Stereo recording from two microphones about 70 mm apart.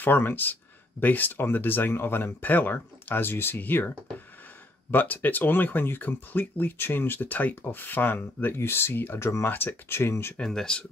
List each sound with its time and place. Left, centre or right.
0.0 s speech: left
4.9 s speech: left
10.3 s speech: centre